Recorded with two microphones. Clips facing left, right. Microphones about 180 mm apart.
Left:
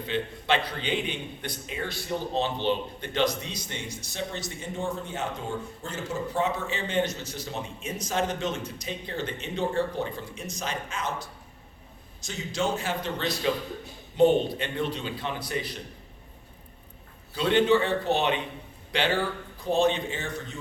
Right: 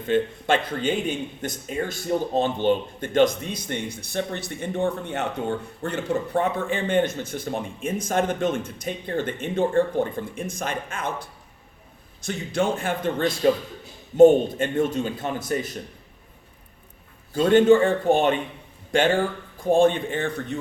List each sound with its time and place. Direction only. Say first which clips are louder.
0.0 s a man's voice: right 8 dB; 45° right (ahead or behind)
17.3 s a man's voice: right 6 dB; 45° right (ahead or behind)